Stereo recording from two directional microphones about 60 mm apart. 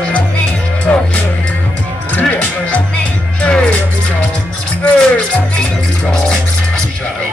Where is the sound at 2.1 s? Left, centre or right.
Left.